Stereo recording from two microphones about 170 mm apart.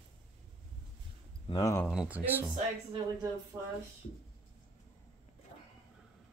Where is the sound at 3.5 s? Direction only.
20° right (ahead or behind).